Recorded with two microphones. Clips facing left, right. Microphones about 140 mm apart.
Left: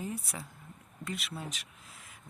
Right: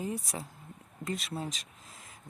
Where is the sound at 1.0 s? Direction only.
40° right (ahead or behind).